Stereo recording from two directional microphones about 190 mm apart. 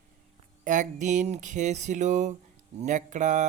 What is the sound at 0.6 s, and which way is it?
Speech, 40° right (ahead or behind).